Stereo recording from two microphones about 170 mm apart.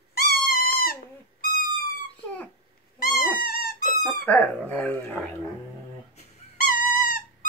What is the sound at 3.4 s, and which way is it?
Dog, 60° left (ahead or behind).